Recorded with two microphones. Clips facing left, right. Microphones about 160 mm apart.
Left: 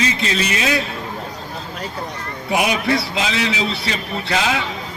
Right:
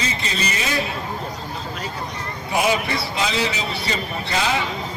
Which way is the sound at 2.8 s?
90° left.